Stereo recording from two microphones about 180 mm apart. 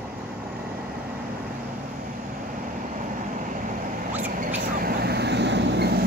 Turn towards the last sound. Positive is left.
turn(degrees=-65)  # may be behind; listen again after turning